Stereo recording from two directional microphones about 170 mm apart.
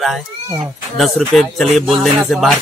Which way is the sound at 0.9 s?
Centre (ahead or behind).